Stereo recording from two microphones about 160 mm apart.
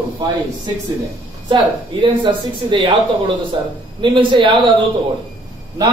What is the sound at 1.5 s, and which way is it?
A man's voice, 30° right (ahead or behind).